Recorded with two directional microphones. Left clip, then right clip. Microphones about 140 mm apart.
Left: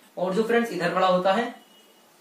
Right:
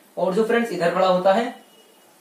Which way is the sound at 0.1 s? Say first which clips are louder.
Right 3 dB; 10° right (ahead or behind).